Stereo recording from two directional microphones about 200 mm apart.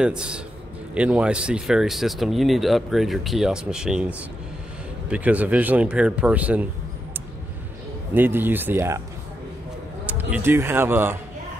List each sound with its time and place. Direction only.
0.0 s speech: 5° right (ahead or behind)
8.1 s speech: 10° right (ahead or behind)
10.0 s speech: 10° right (ahead or behind)